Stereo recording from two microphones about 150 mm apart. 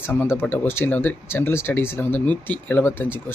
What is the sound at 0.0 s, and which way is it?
Speech, 10° left (ahead or behind).